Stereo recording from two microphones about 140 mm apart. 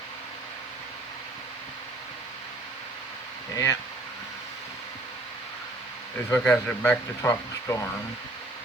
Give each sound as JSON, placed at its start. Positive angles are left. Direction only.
{"t": 3.5, "sound": "speech", "side_deg": 20}
{"t": 6.4, "sound": "speech", "side_deg": 10}